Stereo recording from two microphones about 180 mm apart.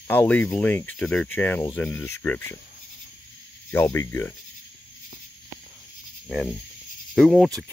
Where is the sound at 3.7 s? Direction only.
15° left (ahead or behind).